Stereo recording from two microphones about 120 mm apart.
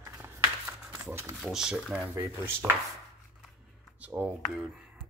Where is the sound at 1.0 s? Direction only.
20° right (ahead or behind).